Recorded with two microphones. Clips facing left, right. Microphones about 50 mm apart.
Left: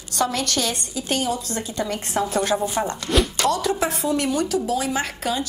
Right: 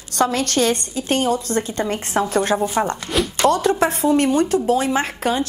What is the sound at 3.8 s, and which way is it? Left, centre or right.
Speech, right.